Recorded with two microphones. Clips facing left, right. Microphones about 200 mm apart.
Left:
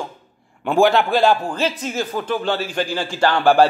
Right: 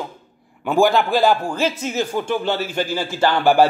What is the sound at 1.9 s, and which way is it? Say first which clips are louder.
Speech: right 1 dB; 10° right (ahead or behind).